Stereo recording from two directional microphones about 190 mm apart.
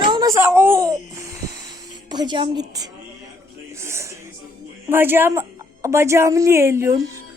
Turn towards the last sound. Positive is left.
turn(degrees=-15)  # may be behind; listen again after turning